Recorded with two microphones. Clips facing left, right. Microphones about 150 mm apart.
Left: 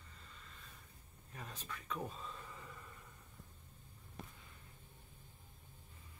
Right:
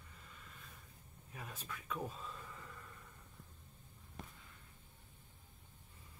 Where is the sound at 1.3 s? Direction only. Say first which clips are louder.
Even; 5° right (ahead or behind).